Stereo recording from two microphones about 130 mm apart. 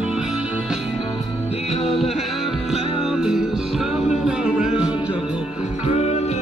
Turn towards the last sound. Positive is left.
turn(degrees=55)  # may be behind; listen again after turning